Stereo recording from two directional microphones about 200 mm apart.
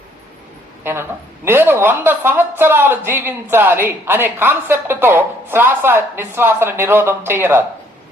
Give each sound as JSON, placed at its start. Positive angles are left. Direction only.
{"t": 0.9, "sound": "speech", "side_deg": -10}